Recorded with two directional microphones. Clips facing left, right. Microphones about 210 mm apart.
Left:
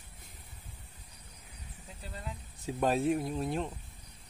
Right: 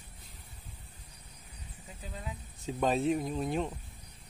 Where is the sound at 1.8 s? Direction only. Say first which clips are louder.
Right 1 dB; centre (ahead or behind).